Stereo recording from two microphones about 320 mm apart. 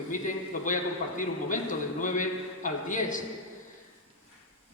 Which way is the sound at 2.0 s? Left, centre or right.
Left.